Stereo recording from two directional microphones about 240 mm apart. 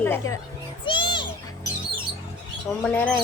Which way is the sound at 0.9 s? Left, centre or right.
Centre.